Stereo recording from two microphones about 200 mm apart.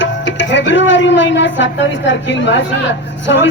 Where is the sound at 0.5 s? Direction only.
65° left (ahead or behind).